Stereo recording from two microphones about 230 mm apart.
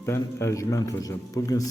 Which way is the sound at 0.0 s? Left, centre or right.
Centre.